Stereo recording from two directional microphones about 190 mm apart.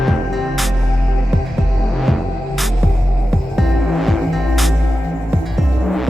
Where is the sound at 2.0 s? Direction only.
Centre (ahead or behind).